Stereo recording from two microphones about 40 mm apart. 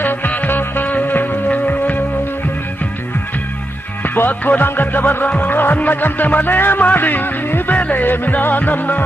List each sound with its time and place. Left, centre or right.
0.0 s music: left
4.0 s music: left
6.8 s music: left